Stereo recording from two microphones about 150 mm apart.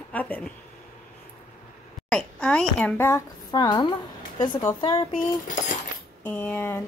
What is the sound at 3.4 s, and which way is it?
Speech, 30° left (ahead or behind).